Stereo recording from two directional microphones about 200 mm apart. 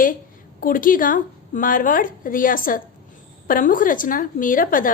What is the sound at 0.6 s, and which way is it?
A woman's voice, 45° left (ahead or behind).